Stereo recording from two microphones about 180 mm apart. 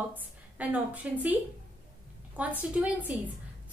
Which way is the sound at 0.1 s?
10° right (ahead or behind).